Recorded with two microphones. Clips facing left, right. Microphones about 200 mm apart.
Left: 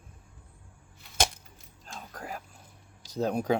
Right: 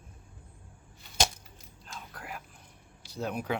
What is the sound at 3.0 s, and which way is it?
Speech, 40° left (ahead or behind).